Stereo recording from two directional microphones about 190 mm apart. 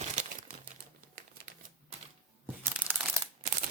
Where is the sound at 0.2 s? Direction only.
40° right (ahead or behind).